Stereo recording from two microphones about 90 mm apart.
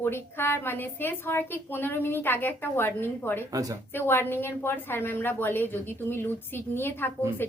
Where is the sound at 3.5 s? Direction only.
40° right (ahead or behind).